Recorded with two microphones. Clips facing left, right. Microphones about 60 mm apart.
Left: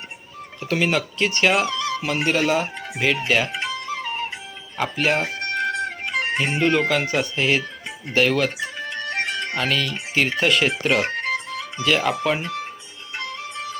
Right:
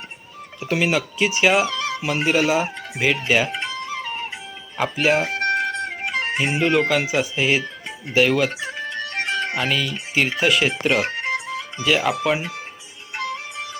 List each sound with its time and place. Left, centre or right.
0.6 s speech: centre
3.2 s music: centre
4.8 s chicken: centre
6.1 s speech: centre
13.1 s music: right